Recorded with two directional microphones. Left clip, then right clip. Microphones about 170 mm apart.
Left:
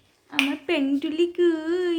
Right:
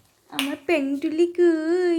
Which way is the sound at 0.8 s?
15° right (ahead or behind).